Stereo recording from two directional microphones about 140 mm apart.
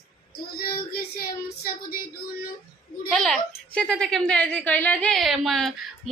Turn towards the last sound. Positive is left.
turn(degrees=0)  # may be behind; listen again after turning